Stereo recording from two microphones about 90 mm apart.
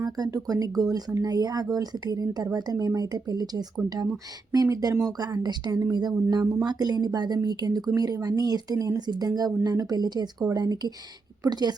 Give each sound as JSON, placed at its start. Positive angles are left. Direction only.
{"t": 0.0, "sound": "speech", "side_deg": -45}